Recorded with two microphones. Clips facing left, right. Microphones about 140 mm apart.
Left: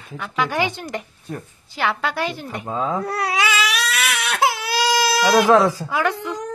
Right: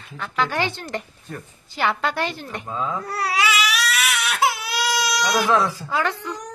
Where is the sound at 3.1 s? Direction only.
20° left (ahead or behind).